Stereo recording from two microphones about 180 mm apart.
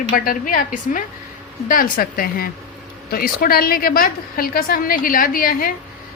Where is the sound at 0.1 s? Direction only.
50° left (ahead or behind).